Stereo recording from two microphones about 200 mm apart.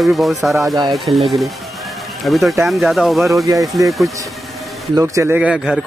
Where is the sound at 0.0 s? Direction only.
Centre (ahead or behind).